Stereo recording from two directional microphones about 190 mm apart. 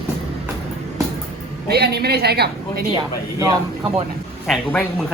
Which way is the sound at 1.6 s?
55° right (ahead or behind).